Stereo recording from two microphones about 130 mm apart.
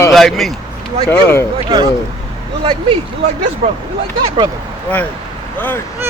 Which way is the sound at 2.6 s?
40° right (ahead or behind).